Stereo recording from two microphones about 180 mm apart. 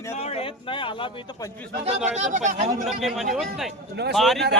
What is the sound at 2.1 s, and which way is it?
Speech, 40° right (ahead or behind).